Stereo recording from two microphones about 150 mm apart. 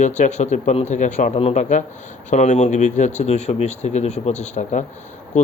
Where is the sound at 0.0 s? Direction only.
55° left (ahead or behind).